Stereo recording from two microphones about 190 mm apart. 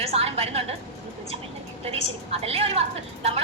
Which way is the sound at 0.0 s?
30° right (ahead or behind).